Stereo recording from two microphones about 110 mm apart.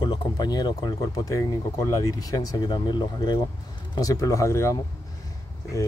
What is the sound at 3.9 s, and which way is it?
Speech, 30° left (ahead or behind).